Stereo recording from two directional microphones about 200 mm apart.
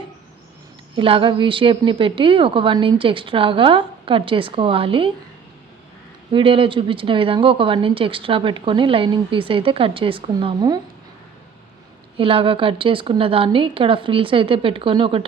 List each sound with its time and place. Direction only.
0.9 s speech: 25° right (ahead or behind)
6.3 s speech: 25° right (ahead or behind)
12.1 s speech: 25° right (ahead or behind)